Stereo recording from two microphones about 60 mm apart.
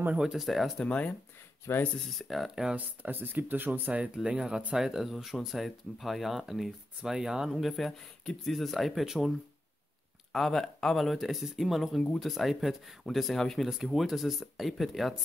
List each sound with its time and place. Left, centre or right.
0.2 s speech: centre
0.8 s speech: left
1.7 s speech: left
2.1 s speech: centre
2.7 s speech: right
4.1 s speech: centre
4.7 s speech: centre
10.3 s speech: centre